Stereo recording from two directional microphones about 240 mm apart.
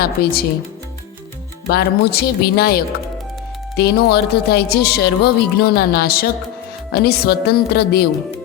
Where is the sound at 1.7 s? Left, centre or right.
Left.